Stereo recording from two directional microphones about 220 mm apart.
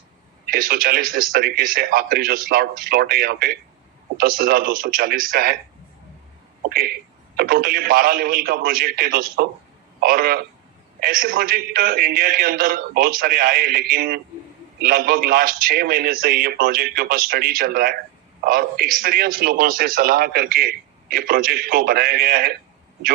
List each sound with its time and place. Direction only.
0.4 s a man's voice: 45° right (ahead or behind)
6.7 s a man's voice: 45° right (ahead or behind)